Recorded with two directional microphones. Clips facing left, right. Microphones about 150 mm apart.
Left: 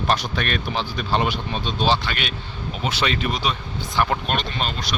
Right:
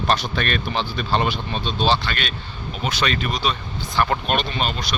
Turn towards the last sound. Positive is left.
turn(degrees=-10)  # may be behind; listen again after turning